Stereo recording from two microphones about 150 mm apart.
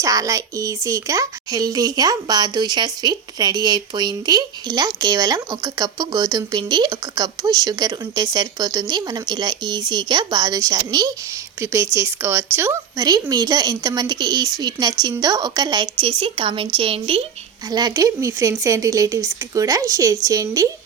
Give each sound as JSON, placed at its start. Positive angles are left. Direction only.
{"t": 0.0, "sound": "speech", "side_deg": -20}
{"t": 17.7, "sound": "speech", "side_deg": -25}